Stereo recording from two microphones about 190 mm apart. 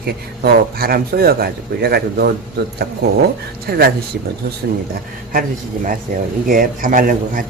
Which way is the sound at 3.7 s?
55° right (ahead or behind).